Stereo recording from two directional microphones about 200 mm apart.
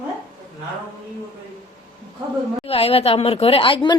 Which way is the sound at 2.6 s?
30° left (ahead or behind).